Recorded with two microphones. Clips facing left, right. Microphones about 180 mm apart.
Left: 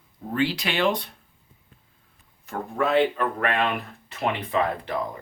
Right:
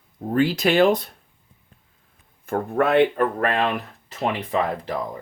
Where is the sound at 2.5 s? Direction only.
55° right (ahead or behind).